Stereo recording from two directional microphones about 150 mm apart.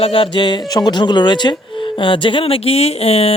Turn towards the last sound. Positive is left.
turn(degrees=40)  # may be behind; listen again after turning